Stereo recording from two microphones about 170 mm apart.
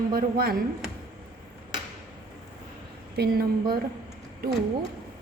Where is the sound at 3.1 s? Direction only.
65° right (ahead or behind).